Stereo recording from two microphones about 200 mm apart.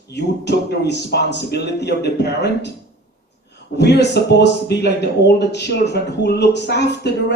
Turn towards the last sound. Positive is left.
turn(degrees=55)  # may be behind; listen again after turning